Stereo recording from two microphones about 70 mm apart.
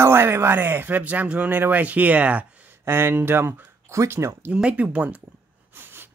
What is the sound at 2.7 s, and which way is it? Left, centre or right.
Speech, right.